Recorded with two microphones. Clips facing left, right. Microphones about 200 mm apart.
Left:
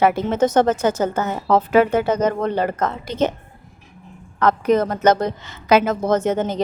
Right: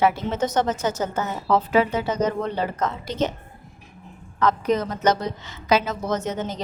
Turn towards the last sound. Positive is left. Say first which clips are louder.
# left 7 dB
turn(degrees=55)  # may be behind; listen again after turning